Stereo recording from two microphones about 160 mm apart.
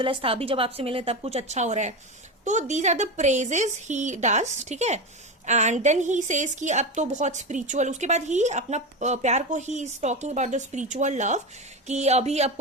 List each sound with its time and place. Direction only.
0.0 s a woman's voice: 35° right (ahead or behind)